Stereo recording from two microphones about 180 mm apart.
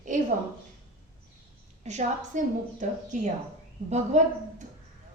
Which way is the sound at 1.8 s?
40° right (ahead or behind).